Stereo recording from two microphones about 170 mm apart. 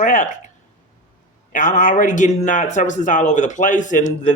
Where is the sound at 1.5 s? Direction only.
50° left (ahead or behind).